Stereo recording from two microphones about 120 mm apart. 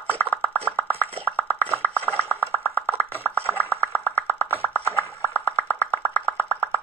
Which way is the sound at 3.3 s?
15° left (ahead or behind).